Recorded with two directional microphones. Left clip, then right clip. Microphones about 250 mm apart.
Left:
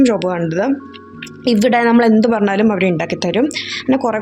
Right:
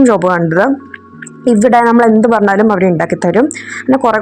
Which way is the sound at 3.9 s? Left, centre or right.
Centre.